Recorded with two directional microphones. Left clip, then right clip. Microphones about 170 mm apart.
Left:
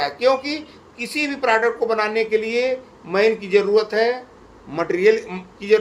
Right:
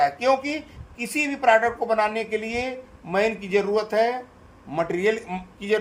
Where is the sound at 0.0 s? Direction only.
50° right (ahead or behind).